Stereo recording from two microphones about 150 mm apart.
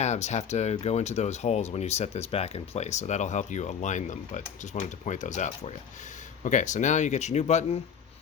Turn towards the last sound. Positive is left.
turn(degrees=45)  # may be behind; listen again after turning